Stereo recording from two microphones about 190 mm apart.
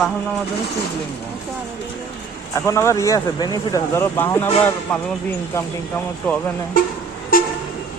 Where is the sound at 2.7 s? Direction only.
15° left (ahead or behind).